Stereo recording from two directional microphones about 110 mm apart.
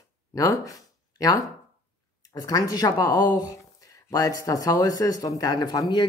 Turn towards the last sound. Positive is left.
turn(degrees=40)  # may be behind; listen again after turning